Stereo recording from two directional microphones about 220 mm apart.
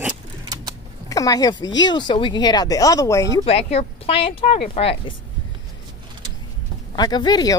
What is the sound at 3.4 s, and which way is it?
Speech, 25° left (ahead or behind).